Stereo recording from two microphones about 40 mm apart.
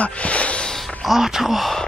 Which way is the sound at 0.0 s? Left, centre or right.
Left.